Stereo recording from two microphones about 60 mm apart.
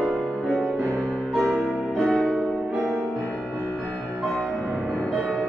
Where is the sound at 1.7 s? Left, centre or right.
Right.